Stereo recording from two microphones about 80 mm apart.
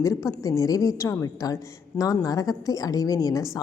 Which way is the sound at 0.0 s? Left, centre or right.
Left.